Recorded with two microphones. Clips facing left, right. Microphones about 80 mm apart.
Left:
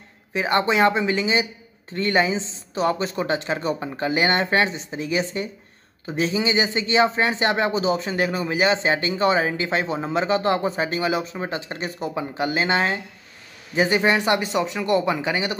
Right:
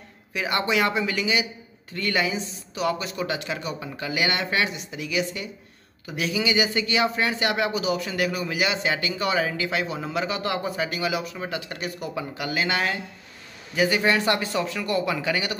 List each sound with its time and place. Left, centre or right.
0.3 s a man's voice: left